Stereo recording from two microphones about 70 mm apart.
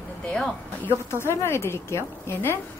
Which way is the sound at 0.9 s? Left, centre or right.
Left.